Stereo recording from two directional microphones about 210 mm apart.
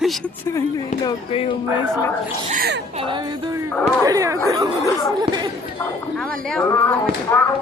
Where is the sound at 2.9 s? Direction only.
25° right (ahead or behind).